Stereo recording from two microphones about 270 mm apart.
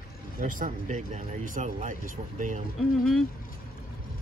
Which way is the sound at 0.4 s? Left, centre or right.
Right.